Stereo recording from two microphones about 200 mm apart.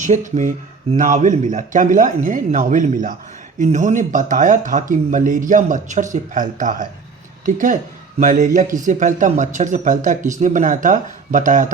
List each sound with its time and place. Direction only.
0.0 s speech: 40° right (ahead or behind)